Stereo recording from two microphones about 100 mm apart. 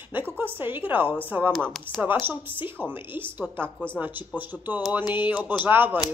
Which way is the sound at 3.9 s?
20° right (ahead or behind).